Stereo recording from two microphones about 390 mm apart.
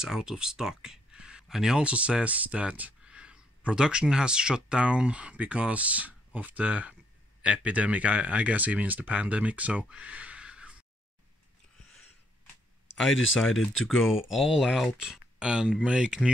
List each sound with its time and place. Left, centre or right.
0.0 s speech: centre
12.9 s speech: centre